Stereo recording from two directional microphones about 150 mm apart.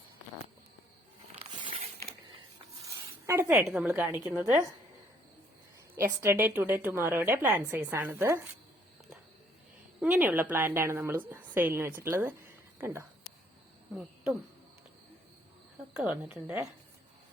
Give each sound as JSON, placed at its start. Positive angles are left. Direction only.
{"t": 1.4, "sound": "a sound", "side_deg": -35}
{"t": 2.8, "sound": "a sound", "side_deg": -20}
{"t": 3.7, "sound": "a woman's voice", "side_deg": -10}
{"t": 6.0, "sound": "a woman's voice", "side_deg": -15}
{"t": 10.0, "sound": "a woman's voice", "side_deg": -10}
{"t": 13.9, "sound": "speech", "side_deg": 0}
{"t": 16.0, "sound": "a woman's voice", "side_deg": -5}